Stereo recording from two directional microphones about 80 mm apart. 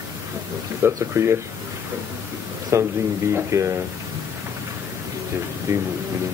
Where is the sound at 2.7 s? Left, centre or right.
Right.